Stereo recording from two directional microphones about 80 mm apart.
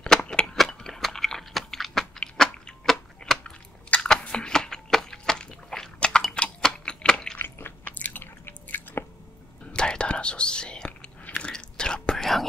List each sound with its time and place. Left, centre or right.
0.0 s crushing: centre
0.6 s a sound: centre
7.3 s chewing: left
9.7 s whispering: centre